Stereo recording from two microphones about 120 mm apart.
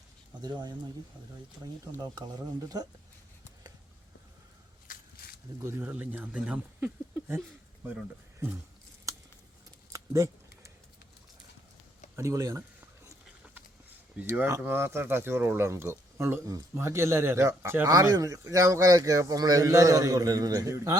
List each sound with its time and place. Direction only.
0.4 s speech: 35° right (ahead or behind)
2.0 s speech: 35° right (ahead or behind)
5.6 s speech: 20° right (ahead or behind)
9.1 s a sound: 30° right (ahead or behind)
12.1 s speech: 25° right (ahead or behind)
14.2 s speech: 20° right (ahead or behind)